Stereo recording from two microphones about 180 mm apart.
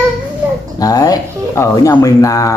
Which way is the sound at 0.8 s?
20° left (ahead or behind).